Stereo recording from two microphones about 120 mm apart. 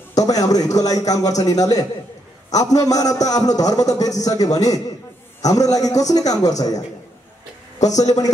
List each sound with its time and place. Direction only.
0.2 s a man's voice: 30° left (ahead or behind)
8.0 s a man's voice: 30° left (ahead or behind)